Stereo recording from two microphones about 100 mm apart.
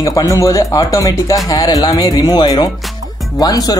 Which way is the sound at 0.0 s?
35° left (ahead or behind).